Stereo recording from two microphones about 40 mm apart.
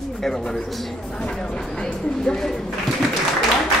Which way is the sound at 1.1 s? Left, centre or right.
Left.